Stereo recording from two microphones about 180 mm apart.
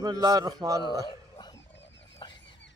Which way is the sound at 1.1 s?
25° left (ahead or behind).